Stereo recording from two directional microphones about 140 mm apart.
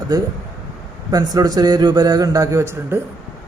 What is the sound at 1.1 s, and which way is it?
Speech, 25° right (ahead or behind).